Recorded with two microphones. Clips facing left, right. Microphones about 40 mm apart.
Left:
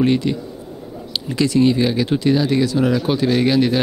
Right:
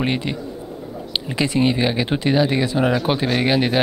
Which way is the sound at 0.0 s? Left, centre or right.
Right.